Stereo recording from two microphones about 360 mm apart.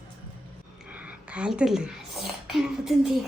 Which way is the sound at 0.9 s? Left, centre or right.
Centre.